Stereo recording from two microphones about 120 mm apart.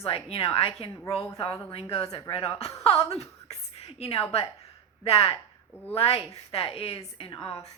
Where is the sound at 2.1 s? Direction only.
35° left (ahead or behind).